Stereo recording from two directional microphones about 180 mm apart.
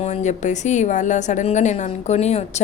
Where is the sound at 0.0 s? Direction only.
40° left (ahead or behind).